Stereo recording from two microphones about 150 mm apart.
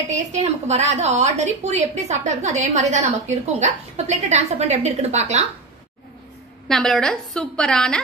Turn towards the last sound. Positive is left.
turn(degrees=5)  # may be behind; listen again after turning